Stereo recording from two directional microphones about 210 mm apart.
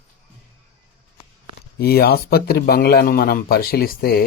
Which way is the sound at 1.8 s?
45° left (ahead or behind).